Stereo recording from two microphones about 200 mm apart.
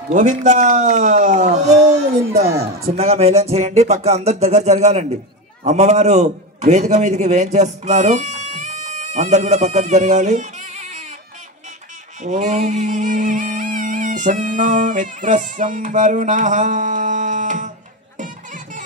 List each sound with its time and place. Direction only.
0.1 s music: 40° right (ahead or behind)
2.9 s music: 30° right (ahead or behind)
5.6 s a man's voice: 35° right (ahead or behind)
12.2 s music: 35° right (ahead or behind)